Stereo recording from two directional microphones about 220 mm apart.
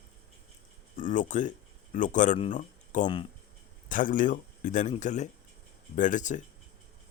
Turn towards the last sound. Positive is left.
turn(degrees=35)  # may be behind; listen again after turning